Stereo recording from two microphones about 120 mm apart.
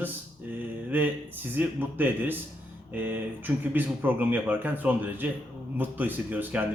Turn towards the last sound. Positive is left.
turn(degrees=-15)  # may be behind; listen again after turning